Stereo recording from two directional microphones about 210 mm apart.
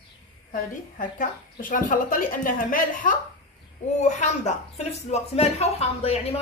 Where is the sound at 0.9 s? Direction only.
40° left (ahead or behind).